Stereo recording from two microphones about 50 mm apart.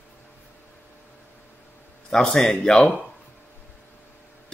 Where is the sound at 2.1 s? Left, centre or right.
Centre.